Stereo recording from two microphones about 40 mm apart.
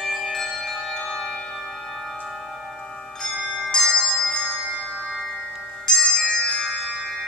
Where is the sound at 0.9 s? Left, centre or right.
Centre.